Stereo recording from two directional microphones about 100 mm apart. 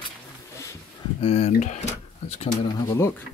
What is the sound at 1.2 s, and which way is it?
Speech, 90° left.